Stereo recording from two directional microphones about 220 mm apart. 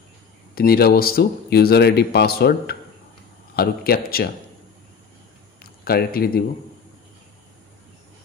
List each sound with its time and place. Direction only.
0.6 s speech: 45° left (ahead or behind)
5.6 s speech: 45° left (ahead or behind)